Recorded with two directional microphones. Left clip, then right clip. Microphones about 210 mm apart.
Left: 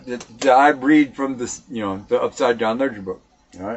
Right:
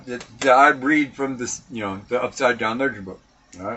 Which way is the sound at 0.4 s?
15° left (ahead or behind).